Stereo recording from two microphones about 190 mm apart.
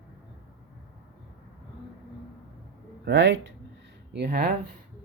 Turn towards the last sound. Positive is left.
turn(degrees=-55)  # may be behind; listen again after turning